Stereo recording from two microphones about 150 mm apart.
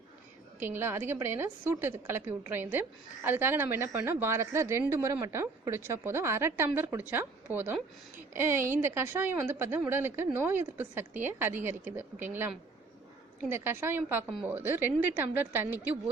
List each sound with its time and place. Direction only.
0.6 s a woman's voice: 15° right (ahead or behind)